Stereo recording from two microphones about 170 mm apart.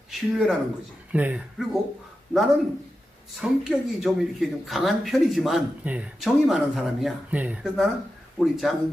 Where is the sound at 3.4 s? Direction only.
5° right (ahead or behind).